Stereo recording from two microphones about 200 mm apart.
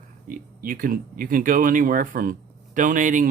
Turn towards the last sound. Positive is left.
turn(degrees=-40)  # may be behind; listen again after turning